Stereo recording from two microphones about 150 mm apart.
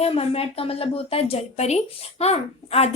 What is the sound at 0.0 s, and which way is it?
Speech, 40° left (ahead or behind).